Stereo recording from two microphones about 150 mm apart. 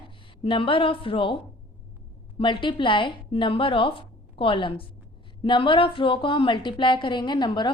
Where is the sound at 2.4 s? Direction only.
35° left (ahead or behind).